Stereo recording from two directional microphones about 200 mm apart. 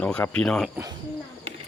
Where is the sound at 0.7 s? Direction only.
15° right (ahead or behind).